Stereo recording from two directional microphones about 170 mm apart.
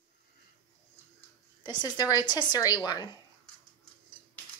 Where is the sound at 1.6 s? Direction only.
25° left (ahead or behind).